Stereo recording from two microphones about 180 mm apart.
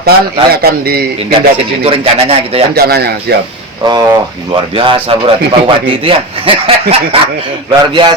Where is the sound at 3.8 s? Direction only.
25° right (ahead or behind).